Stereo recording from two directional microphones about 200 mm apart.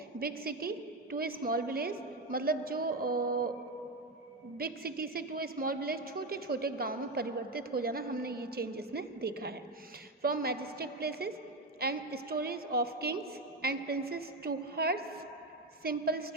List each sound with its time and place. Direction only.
0.2 s a woman's voice: 50° right (ahead or behind)
4.5 s a woman's voice: 50° right (ahead or behind)